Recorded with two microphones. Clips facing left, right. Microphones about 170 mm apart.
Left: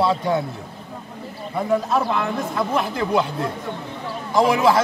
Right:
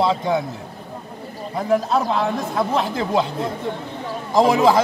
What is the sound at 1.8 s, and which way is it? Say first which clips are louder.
A man's voice: right 1 dB; 30° right (ahead or behind).